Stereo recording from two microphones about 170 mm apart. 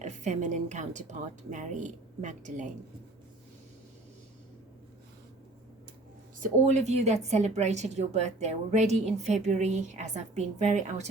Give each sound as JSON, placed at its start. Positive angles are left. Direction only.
{"t": 0.0, "sound": "a woman's voice", "side_deg": -45}
{"t": 6.4, "sound": "a woman's voice", "side_deg": -45}